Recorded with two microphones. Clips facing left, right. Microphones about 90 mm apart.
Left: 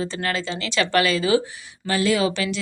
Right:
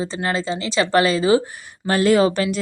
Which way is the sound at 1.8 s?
45° right (ahead or behind).